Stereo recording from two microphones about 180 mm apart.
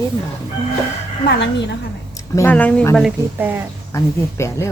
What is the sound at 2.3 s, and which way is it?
Speech, 15° left (ahead or behind).